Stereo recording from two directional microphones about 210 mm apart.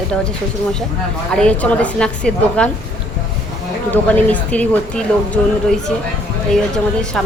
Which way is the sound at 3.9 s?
5° left (ahead or behind).